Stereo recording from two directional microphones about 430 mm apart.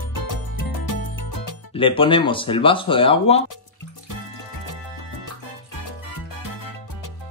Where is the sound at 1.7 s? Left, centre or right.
Centre.